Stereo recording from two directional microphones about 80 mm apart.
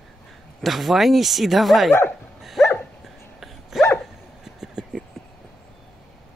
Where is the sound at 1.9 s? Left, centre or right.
Left.